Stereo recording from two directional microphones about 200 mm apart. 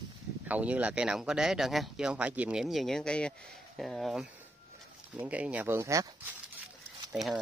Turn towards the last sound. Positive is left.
turn(degrees=-5)  # may be behind; listen again after turning